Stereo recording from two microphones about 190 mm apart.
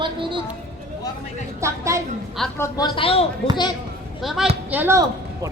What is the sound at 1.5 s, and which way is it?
Speech, 15° right (ahead or behind).